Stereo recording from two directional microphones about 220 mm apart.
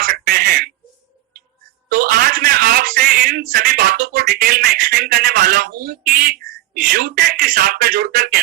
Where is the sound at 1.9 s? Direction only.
40° right (ahead or behind).